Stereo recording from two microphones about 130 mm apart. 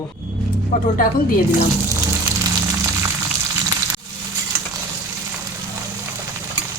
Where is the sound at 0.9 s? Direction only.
90° left.